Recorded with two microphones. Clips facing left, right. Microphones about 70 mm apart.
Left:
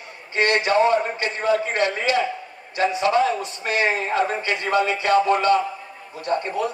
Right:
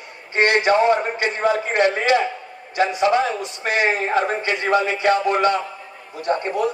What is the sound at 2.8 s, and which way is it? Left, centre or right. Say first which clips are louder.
A man's voice: right 1 dB; right.